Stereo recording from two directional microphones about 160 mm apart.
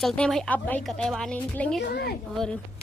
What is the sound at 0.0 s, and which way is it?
Speech, 5° left (ahead or behind).